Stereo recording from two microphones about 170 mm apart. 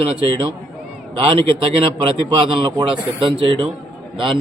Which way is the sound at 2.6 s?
30° right (ahead or behind).